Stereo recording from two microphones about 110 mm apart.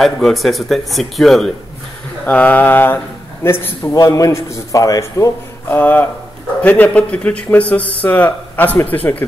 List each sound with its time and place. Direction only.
0.0 s speech: centre (ahead or behind)
2.2 s a man's voice: 15° left (ahead or behind); by 5.8 s 30° left (ahead or behind)
5.8 s speech: 15° left (ahead or behind)